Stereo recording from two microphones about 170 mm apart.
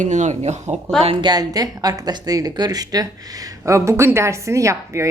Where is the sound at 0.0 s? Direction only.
45° right (ahead or behind).